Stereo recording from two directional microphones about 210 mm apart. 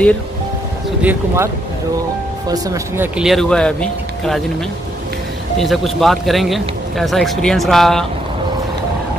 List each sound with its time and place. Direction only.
1.0 s speech: 10° right (ahead or behind)
3.2 s speech: centre (ahead or behind)
5.6 s speech: centre (ahead or behind)